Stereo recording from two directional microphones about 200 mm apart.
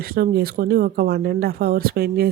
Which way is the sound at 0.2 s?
50° right (ahead or behind).